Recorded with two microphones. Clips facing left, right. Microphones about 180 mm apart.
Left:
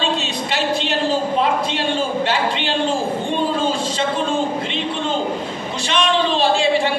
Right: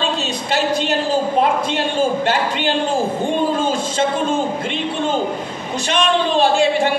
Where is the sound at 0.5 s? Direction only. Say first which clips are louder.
Right 3 dB; 45° right (ahead or behind).